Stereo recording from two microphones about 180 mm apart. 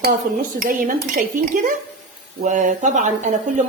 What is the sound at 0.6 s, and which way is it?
Speech, 50° right (ahead or behind).